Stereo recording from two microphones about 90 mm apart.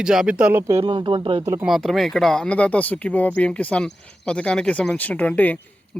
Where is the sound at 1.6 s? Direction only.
Centre (ahead or behind).